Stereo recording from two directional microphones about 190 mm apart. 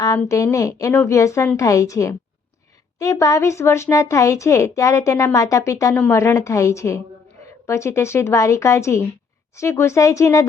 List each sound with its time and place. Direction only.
0.0 s a woman's voice: 15° left (ahead or behind)